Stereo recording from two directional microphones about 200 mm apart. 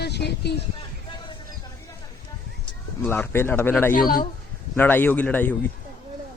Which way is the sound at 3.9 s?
45° left (ahead or behind).